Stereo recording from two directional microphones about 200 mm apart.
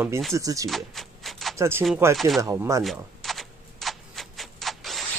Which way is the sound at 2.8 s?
Centre (ahead or behind).